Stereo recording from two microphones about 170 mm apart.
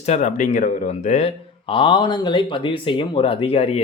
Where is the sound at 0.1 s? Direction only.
45° left (ahead or behind).